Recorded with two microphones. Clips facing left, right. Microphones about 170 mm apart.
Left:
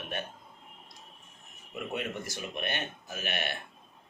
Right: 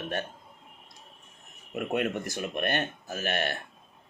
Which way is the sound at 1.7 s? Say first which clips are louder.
Right 6 dB; 60° right (ahead or behind).